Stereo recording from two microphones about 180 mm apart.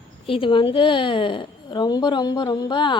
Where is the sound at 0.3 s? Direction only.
30° left (ahead or behind).